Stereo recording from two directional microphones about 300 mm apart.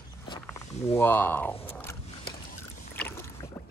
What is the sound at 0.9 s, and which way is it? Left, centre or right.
Speech, centre.